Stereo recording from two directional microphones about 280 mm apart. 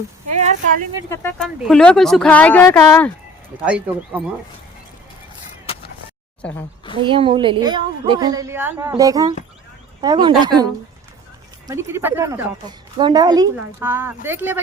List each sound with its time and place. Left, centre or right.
0.3 s speech: right
1.1 s speech: centre
3.7 s speech: centre
6.9 s a woman's voice: centre
11.7 s a woman's voice: centre